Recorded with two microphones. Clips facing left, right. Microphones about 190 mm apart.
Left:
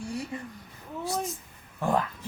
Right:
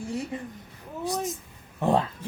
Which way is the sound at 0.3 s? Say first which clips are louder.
Right 2 dB; 20° right (ahead or behind).